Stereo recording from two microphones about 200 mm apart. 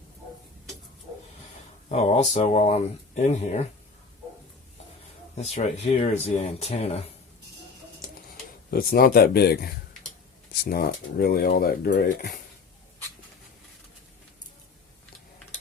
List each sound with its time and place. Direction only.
1.9 s speech: 35° left (ahead or behind)
5.4 s speech: 35° left (ahead or behind)
8.7 s speech: 50° left (ahead or behind)